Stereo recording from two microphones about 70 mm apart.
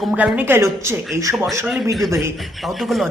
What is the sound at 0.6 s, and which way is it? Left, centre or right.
Speech, right.